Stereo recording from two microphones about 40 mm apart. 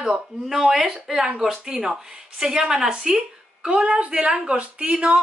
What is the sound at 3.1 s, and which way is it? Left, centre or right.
A woman's voice, right.